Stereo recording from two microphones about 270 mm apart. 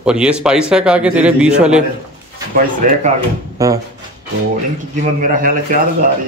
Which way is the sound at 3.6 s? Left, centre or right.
Centre.